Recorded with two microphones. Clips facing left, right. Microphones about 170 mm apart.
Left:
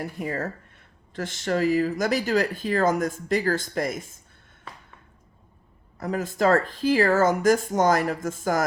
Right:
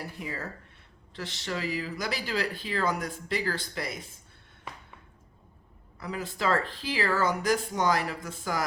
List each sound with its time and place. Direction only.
0.0 s speech: 50° left (ahead or behind)
6.0 s speech: 45° left (ahead or behind)